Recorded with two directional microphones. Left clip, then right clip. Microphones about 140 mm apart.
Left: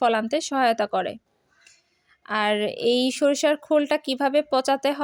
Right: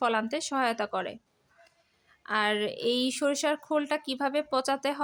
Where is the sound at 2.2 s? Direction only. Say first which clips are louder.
Left 4 dB; 30° left (ahead or behind).